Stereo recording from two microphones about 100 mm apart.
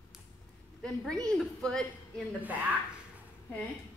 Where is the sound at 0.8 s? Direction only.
5° left (ahead or behind).